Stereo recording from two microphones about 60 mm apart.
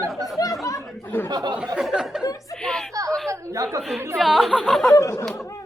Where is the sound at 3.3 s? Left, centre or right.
Right.